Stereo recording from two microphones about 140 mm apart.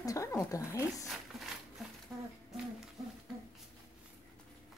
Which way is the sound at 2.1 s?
15° right (ahead or behind).